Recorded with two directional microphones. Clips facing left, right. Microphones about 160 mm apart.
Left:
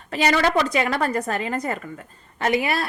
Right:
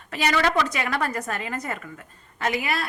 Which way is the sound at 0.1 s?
30° left (ahead or behind).